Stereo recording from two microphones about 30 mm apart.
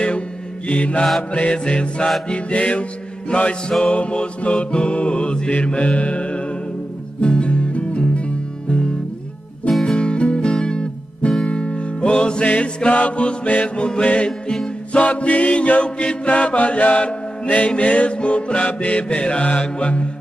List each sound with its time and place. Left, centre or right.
0.7 s mantra: left
1.3 s music: left
2.3 s music: left
5.5 s mantra: left
7.2 s music: left
9.8 s music: left
12.4 s mantra: left
14.0 s music: left
14.9 s mantra: left
17.6 s music: left
18.7 s mantra: left